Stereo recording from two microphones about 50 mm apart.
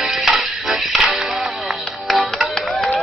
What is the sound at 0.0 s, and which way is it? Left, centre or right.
Music, centre.